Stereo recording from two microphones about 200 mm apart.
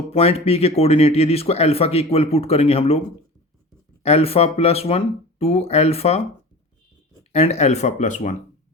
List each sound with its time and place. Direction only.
0.1 s speech: 30° left (ahead or behind)
4.0 s speech: 30° left (ahead or behind)
7.3 s speech: 35° left (ahead or behind)